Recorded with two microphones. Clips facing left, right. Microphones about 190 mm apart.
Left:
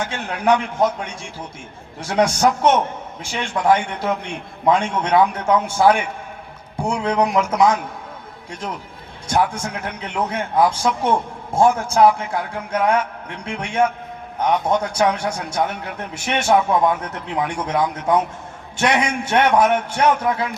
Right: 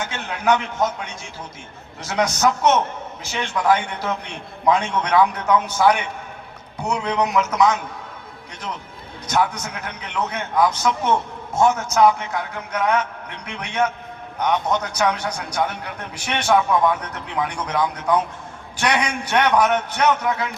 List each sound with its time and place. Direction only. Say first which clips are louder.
0.1 s a man's voice: left 1 dB; 30° left (ahead or behind)
2.0 s a man's voice: left 3 dB; 30° left (ahead or behind)
9.2 s a man's voice: left 2 dB; 30° left (ahead or behind)